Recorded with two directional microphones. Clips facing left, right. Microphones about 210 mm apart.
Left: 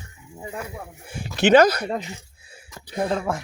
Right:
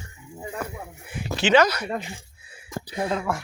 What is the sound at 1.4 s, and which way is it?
Speech, 55° left (ahead or behind).